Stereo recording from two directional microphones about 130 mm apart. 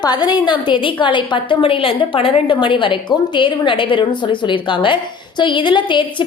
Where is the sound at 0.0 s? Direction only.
30° left (ahead or behind).